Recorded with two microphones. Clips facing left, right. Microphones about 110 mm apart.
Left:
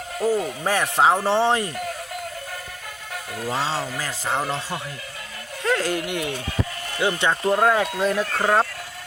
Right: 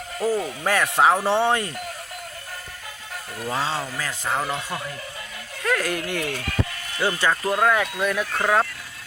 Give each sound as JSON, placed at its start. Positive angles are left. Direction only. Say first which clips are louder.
{"t": 0.2, "sound": "speech", "louder": "left 1 dB", "side_deg": 0}
{"t": 0.6, "sound": "speech", "louder": "right 1 dB", "side_deg": 25}
{"t": 3.3, "sound": "speech", "louder": "left 1 dB", "side_deg": 5}
{"t": 5.6, "sound": "speech", "louder": "left 1 dB", "side_deg": 25}
{"t": 8.3, "sound": "speech", "louder": "right 1 dB", "side_deg": 5}